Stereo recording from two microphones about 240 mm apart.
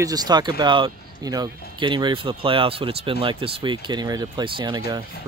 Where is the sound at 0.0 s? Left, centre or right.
Centre.